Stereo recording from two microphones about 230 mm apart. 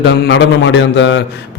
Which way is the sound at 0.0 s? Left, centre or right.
Left.